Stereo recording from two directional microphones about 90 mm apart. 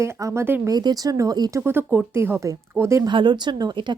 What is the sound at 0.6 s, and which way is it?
Speech, 45° right (ahead or behind).